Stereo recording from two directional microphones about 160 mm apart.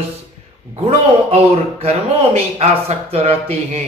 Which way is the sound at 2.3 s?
40° right (ahead or behind).